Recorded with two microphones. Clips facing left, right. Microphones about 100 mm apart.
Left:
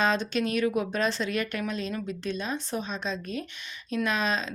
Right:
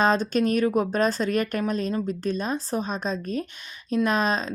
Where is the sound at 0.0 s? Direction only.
40° right (ahead or behind).